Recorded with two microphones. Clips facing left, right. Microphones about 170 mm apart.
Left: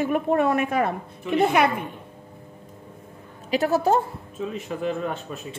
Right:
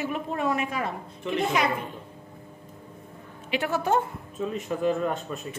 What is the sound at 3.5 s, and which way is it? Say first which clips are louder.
Speech: left 5 dB; 40° left (ahead or behind).